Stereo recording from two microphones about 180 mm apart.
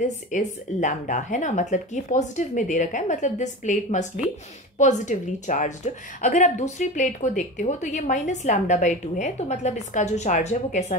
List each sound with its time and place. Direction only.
0.0 s speech: 45° left (ahead or behind)